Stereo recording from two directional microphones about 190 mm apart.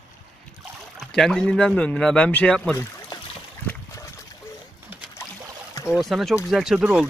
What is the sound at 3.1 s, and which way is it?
Boat, 20° left (ahead or behind).